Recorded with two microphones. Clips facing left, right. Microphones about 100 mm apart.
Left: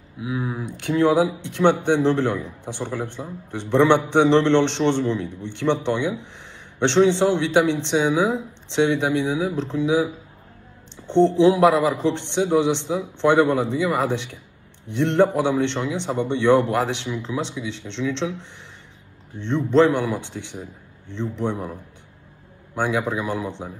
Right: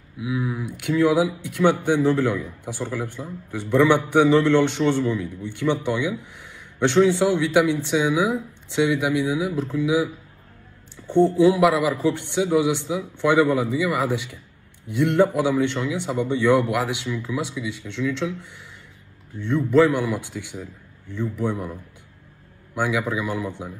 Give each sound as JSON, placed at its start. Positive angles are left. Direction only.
{"t": 0.2, "sound": "speech", "side_deg": 25}
{"t": 11.0, "sound": "a sound", "side_deg": 20}
{"t": 11.3, "sound": "speech", "side_deg": 20}
{"t": 15.1, "sound": "speech", "side_deg": 20}